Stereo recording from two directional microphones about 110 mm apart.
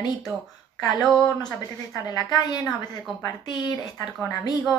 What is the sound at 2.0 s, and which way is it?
A woman's voice, 35° left (ahead or behind).